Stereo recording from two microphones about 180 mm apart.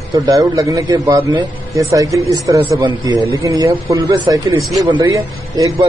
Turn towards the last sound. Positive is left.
turn(degrees=-20)  # may be behind; listen again after turning